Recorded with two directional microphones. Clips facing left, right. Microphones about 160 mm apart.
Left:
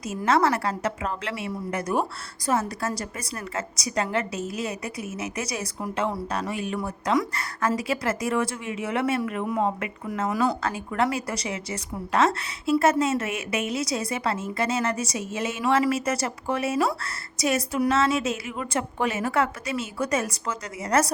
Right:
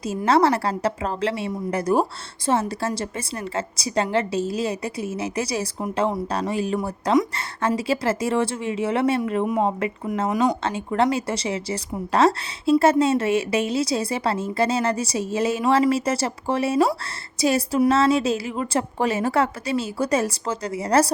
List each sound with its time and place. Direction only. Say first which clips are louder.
0.3 s a woman's voice: right 3 dB; 30° right (ahead or behind)